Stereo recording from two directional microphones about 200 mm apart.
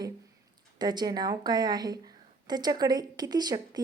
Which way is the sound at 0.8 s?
20° right (ahead or behind).